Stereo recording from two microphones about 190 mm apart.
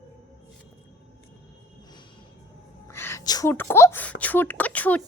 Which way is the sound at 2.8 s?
15° left (ahead or behind).